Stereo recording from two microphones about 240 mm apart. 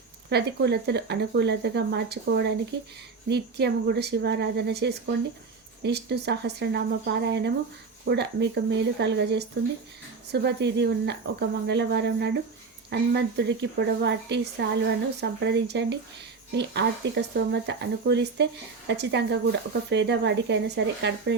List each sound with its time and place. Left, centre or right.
0.3 s a woman's voice: right